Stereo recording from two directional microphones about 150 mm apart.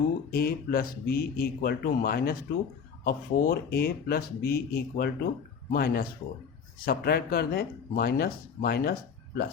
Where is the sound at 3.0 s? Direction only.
75° left (ahead or behind).